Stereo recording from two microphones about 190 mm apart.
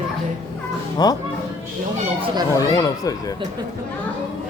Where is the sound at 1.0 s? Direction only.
20° left (ahead or behind).